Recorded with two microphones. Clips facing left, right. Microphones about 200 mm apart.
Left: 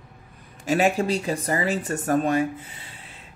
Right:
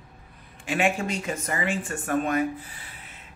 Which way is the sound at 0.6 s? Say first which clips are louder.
Left 4 dB; 40° left (ahead or behind).